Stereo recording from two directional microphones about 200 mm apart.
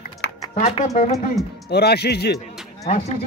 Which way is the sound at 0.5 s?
35° left (ahead or behind).